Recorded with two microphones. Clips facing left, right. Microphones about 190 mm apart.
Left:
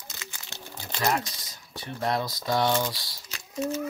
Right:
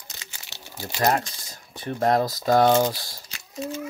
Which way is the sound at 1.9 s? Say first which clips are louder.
Right 7 dB; 45° right (ahead or behind).